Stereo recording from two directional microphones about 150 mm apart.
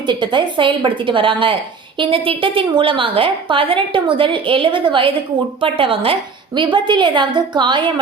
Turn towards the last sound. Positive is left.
turn(degrees=-30)  # may be behind; listen again after turning